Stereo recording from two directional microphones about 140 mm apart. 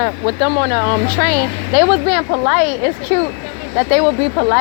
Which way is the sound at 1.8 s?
45° right (ahead or behind).